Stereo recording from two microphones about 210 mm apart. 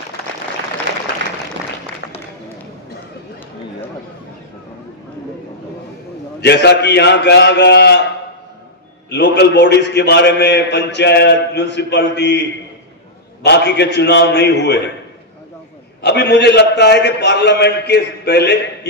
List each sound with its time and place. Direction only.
6.4 s a man's voice: 50° left (ahead or behind)
9.1 s a man's voice: 55° left (ahead or behind)
16.0 s a man's voice: 50° left (ahead or behind)